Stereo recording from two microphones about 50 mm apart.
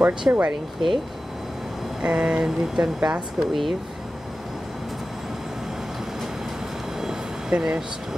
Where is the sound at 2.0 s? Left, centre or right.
Centre.